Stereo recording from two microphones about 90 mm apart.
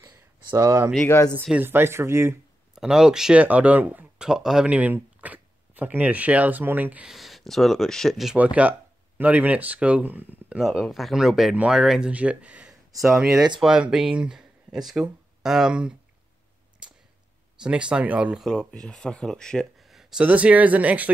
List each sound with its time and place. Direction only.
0.0 s a sound: 30° right (ahead or behind)
1.6 s speech: 25° right (ahead or behind)
2.7 s speech: 5° right (ahead or behind)
7.1 s speech: centre (ahead or behind)
8.4 s speech: 15° right (ahead or behind)
10.6 s speech: centre (ahead or behind)
12.1 s speech: 15° right (ahead or behind)
17.6 s speech: 10° right (ahead or behind)
18.4 s speech: 5° left (ahead or behind)
20.2 s speech: 15° right (ahead or behind)